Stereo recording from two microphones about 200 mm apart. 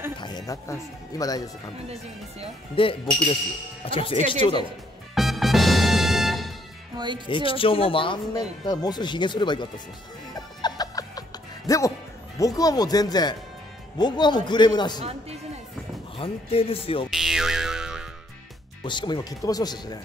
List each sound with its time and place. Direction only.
0.2 s speech: 20° left (ahead or behind)
2.7 s a man's voice: 25° left (ahead or behind)
5.1 s music: centre (ahead or behind)
7.2 s a man's voice: 25° left (ahead or behind)
10.3 s music: 20° left (ahead or behind)
12.4 s a man's voice: 15° left (ahead or behind)
16.2 s a man's voice: 30° left (ahead or behind)
17.1 s music: centre (ahead or behind)
18.9 s a man's voice: 20° left (ahead or behind)